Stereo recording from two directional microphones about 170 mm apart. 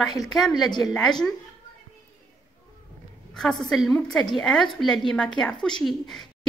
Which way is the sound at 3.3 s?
5° left (ahead or behind).